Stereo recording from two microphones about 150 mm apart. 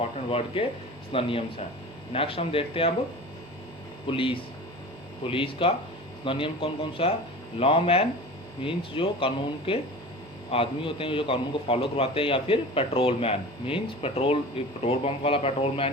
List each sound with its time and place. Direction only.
0.0 s a man's voice: 40° left (ahead or behind)
4.0 s a man's voice: 35° left (ahead or behind)